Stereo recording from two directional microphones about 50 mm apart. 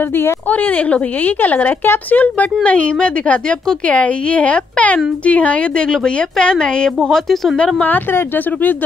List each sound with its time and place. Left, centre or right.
0.5 s speech: left
2.6 s a woman's voice: left
7.1 s speech: centre
7.5 s a woman's voice: left